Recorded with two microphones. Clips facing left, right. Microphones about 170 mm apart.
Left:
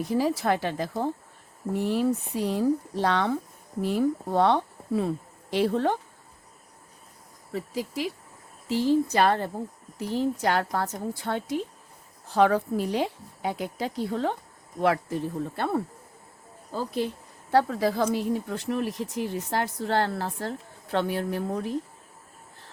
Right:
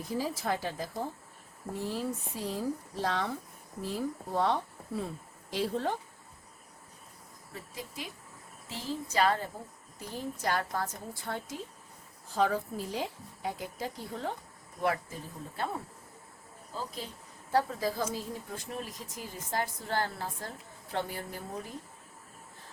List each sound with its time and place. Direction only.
0.0 s speech: 70° left (ahead or behind)
7.5 s speech: 75° left (ahead or behind)